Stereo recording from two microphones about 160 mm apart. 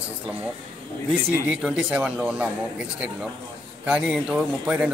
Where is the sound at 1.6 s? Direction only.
5° right (ahead or behind).